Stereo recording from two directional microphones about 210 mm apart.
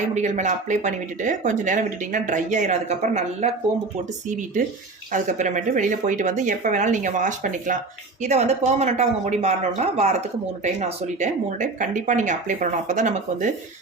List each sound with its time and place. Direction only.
0.0 s speech: 35° right (ahead or behind)